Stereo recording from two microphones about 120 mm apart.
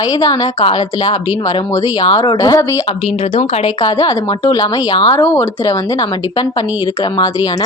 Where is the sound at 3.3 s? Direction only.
55° left (ahead or behind).